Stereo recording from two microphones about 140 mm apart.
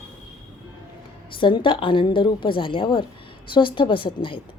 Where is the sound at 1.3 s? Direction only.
35° left (ahead or behind).